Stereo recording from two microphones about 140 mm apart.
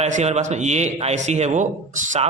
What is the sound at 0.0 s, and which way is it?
A man's voice, 55° right (ahead or behind).